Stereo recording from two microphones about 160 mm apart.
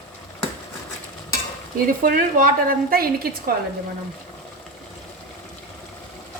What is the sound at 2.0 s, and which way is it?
A woman's voice, 60° right (ahead or behind).